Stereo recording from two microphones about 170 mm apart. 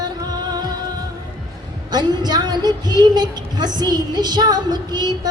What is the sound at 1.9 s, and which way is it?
A woman's voice, 25° right (ahead or behind).